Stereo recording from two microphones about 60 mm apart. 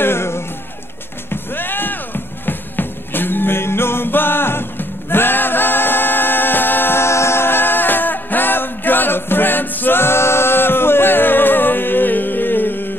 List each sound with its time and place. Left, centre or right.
0.0 s music: left